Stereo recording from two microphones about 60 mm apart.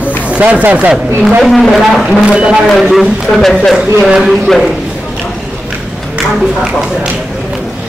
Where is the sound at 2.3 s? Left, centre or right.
Centre.